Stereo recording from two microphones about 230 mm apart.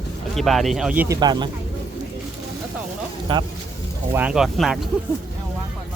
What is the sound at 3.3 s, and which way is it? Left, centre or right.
Speech, right.